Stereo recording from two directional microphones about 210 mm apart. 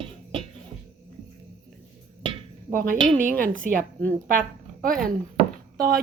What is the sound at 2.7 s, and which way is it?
Speech, 40° right (ahead or behind).